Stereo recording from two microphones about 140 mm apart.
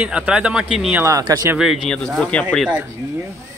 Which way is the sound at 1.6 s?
Centre (ahead or behind).